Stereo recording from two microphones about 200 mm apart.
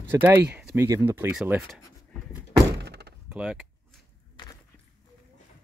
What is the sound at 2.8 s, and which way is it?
Thunk, 55° right (ahead or behind).